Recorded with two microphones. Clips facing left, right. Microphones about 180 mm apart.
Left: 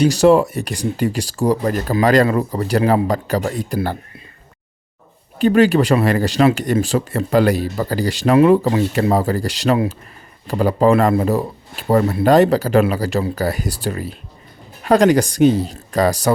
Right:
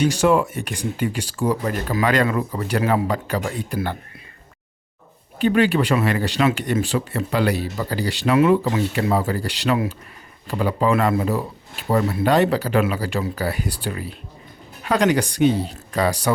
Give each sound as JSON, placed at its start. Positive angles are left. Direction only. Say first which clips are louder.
{"t": 0.0, "sound": "speech", "louder": "left 5 dB", "side_deg": 40}
{"t": 5.4, "sound": "speech", "louder": "left 5 dB", "side_deg": 40}